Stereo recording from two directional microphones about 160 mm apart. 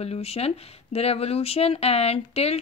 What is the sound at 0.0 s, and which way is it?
Speech, 40° left (ahead or behind).